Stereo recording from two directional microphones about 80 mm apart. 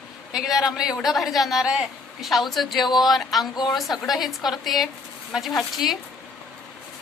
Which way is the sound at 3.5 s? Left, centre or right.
Left.